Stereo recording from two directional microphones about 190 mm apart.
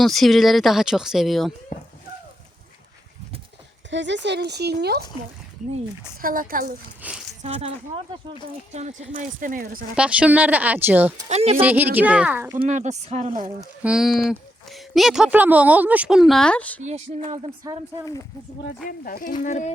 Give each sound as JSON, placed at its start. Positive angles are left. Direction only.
{"t": 0.0, "sound": "speech", "side_deg": 0}
{"t": 3.8, "sound": "speech", "side_deg": -70}
{"t": 6.2, "sound": "speech", "side_deg": -45}
{"t": 7.0, "sound": "speech", "side_deg": -10}
{"t": 7.4, "sound": "speech", "side_deg": -30}
{"t": 9.9, "sound": "speech", "side_deg": -5}
{"t": 11.3, "sound": "speech", "side_deg": -35}
{"t": 11.6, "sound": "speech", "side_deg": -10}
{"t": 12.6, "sound": "speech", "side_deg": -40}
{"t": 13.8, "sound": "speech", "side_deg": 0}
{"t": 16.8, "sound": "speech", "side_deg": -40}
{"t": 18.9, "sound": "speech", "side_deg": 45}